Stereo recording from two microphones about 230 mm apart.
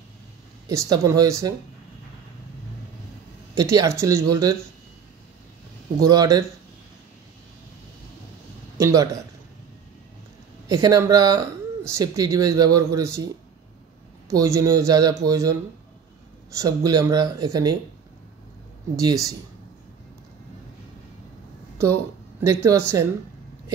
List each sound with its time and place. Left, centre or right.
0.7 s speech: centre
3.5 s speech: centre
6.0 s speech: centre
8.7 s speech: centre
10.7 s speech: centre
14.3 s speech: centre
16.5 s speech: centre
18.9 s speech: centre
22.4 s speech: centre